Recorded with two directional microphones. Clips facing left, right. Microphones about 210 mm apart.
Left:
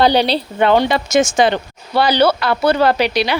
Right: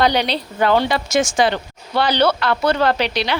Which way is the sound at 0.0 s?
30° left (ahead or behind).